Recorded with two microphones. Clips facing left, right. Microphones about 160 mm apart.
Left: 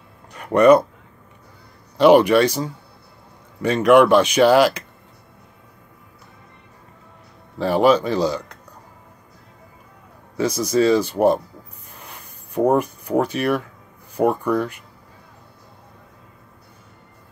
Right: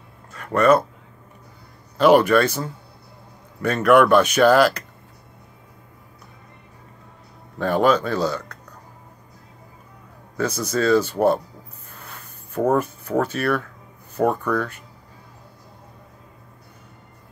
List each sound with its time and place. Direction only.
0.3 s speech: 15° left (ahead or behind)
2.0 s speech: 10° left (ahead or behind)
7.6 s speech: 10° left (ahead or behind)
10.3 s speech: 10° left (ahead or behind)
11.9 s a sound: 15° left (ahead or behind)
14.1 s speech: 10° left (ahead or behind)